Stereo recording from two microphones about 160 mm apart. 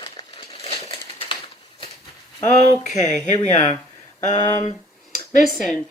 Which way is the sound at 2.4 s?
45° left (ahead or behind).